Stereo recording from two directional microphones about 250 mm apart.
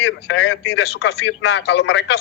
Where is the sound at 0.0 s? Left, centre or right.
Left.